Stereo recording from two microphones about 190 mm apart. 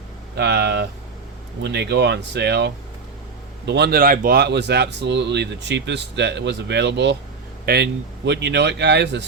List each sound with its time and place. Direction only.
0.3 s speech: 65° right (ahead or behind)